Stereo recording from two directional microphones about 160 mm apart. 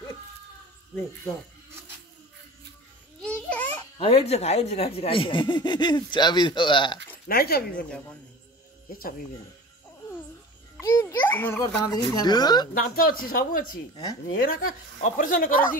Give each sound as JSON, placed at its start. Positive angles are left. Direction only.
{"t": 3.2, "sound": "babbling", "side_deg": 5}
{"t": 4.0, "sound": "speech", "side_deg": 40}
{"t": 7.2, "sound": "speech", "side_deg": 75}
{"t": 10.8, "sound": "a sound", "side_deg": 15}
{"t": 11.8, "sound": "speech", "side_deg": 25}
{"t": 12.7, "sound": "speech", "side_deg": 65}